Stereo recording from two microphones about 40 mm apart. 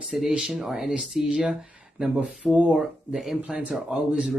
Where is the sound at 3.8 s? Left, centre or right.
Centre.